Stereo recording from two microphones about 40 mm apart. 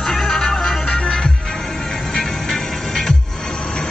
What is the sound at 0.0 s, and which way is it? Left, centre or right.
Music, centre.